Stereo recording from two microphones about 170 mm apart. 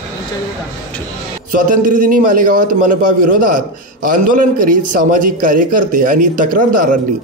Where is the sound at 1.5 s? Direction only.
50° right (ahead or behind).